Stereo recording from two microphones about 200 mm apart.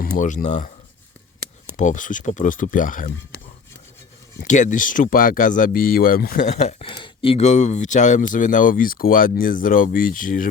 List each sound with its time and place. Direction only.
0.0 s speech: 40° left (ahead or behind)
1.7 s speech: 40° left (ahead or behind)
4.4 s speech: 40° left (ahead or behind)